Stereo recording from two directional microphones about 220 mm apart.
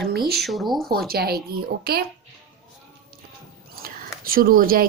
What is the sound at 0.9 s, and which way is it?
A woman's voice, 45° right (ahead or behind).